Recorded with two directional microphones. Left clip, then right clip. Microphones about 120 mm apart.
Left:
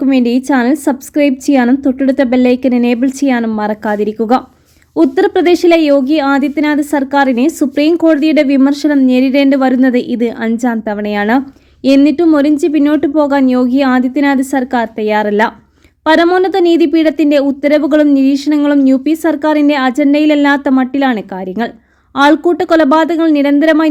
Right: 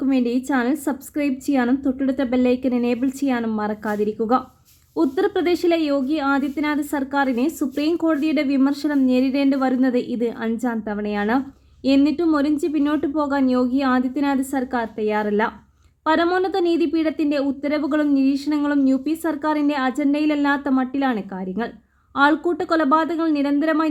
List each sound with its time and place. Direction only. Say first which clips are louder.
0.0 s a woman's voice: left 9 dB; 20° left (ahead or behind)